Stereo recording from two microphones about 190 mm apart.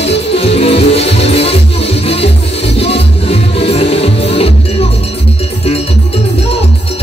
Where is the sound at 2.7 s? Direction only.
30° left (ahead or behind).